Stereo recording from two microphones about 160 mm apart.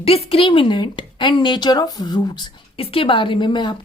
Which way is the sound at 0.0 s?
40° left (ahead or behind).